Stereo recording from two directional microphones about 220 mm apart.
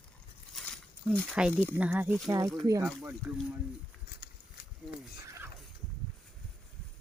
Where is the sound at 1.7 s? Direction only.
5° right (ahead or behind).